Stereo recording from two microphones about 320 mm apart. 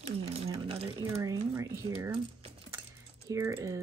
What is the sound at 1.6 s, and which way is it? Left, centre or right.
Speech, centre.